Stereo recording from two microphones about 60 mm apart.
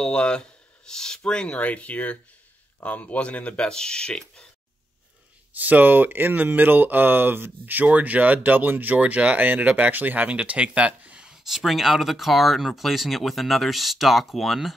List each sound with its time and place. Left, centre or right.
0.0 s speech: centre
5.5 s speech: right
11.2 s speech: centre